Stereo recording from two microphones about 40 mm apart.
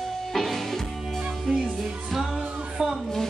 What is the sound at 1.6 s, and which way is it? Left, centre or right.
Music, centre.